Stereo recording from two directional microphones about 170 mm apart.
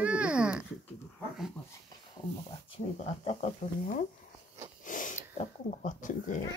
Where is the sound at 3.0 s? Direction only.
40° left (ahead or behind).